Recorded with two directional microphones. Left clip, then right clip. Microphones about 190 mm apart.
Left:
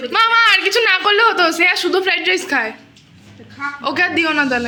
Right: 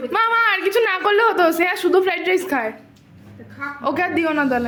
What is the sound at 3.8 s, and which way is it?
Speech, 15° right (ahead or behind).